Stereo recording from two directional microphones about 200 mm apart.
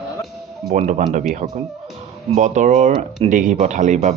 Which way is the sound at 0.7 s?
35° right (ahead or behind).